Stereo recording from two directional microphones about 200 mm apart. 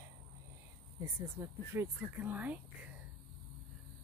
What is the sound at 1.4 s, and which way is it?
Speech, 15° right (ahead or behind).